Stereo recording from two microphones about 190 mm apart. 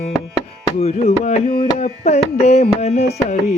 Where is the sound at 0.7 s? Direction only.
35° left (ahead or behind).